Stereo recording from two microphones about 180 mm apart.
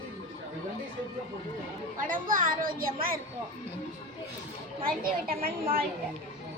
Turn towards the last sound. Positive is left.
turn(degrees=-55)  # may be behind; listen again after turning